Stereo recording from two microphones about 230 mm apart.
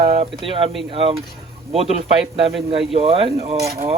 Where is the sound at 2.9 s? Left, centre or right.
Right.